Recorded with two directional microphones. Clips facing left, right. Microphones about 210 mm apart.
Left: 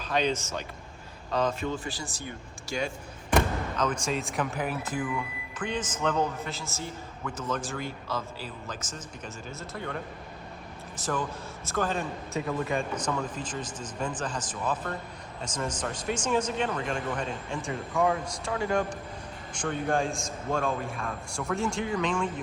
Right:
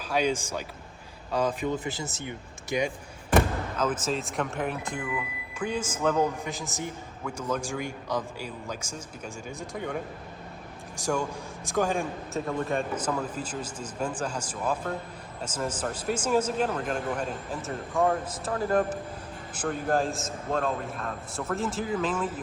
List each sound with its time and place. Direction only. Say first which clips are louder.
0.0 s a man's voice: right 1 dB; 10° right (ahead or behind)
3.3 s speech: right 2 dB; 5° right (ahead or behind)
5.5 s a man's voice: right 2 dB; 10° right (ahead or behind)
12.3 s a man's voice: even; centre (ahead or behind)